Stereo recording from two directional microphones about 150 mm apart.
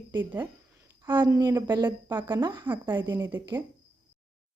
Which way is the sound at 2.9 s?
15° right (ahead or behind).